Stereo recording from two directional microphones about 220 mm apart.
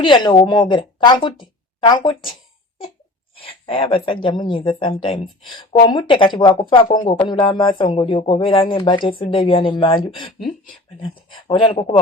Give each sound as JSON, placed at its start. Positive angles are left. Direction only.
{"t": 0.0, "sound": "speech", "side_deg": 20}
{"t": 3.3, "sound": "speech", "side_deg": 25}
{"t": 11.3, "sound": "speech", "side_deg": 20}